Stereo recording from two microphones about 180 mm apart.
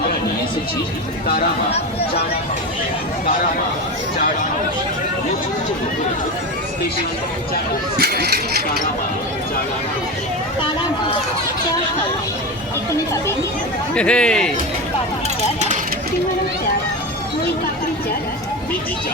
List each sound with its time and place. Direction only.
1.7 s speech: 35° left (ahead or behind)
7.9 s speech: 55° right (ahead or behind)
13.9 s a man's voice: 5° left (ahead or behind)